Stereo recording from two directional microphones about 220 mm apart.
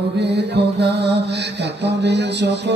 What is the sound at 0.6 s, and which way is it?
Music, 50° right (ahead or behind).